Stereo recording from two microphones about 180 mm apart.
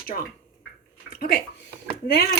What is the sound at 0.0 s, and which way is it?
Speech, 55° left (ahead or behind).